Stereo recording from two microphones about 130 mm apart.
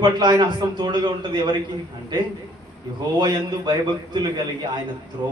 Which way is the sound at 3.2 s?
35° right (ahead or behind).